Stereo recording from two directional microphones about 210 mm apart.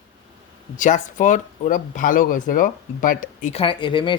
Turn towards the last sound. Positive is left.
turn(degrees=25)  # may be behind; listen again after turning